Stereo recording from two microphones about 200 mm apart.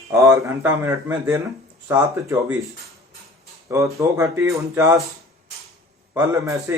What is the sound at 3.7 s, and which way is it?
Speech, 15° right (ahead or behind).